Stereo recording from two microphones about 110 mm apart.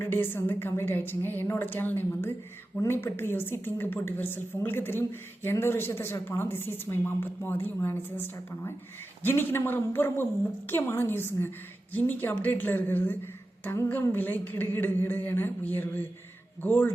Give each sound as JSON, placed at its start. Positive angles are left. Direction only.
{"t": 0.0, "sound": "a woman's voice", "side_deg": 20}
{"t": 9.2, "sound": "a woman's voice", "side_deg": 20}